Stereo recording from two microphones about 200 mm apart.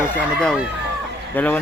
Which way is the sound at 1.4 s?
10° left (ahead or behind).